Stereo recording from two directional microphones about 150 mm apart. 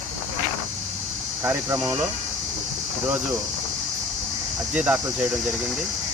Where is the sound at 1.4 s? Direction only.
20° right (ahead or behind).